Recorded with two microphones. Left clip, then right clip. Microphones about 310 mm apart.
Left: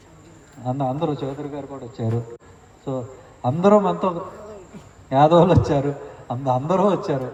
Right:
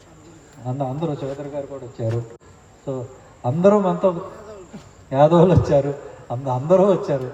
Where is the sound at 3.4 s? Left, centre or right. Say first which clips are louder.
Even; centre.